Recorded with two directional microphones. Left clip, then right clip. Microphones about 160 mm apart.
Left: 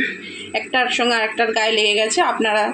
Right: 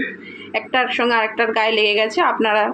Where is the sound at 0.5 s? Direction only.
10° left (ahead or behind).